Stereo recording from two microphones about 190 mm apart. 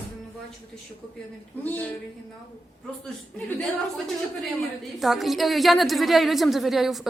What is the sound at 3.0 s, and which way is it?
A woman's voice, centre (ahead or behind).